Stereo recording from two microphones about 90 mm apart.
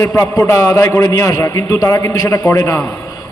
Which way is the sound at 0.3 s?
35° left (ahead or behind).